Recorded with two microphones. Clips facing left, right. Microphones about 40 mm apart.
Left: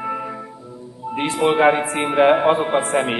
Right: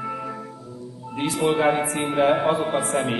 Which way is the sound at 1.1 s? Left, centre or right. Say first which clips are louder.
Left 4 dB; left.